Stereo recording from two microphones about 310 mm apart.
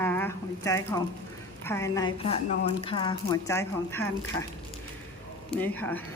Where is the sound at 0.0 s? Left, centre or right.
Centre.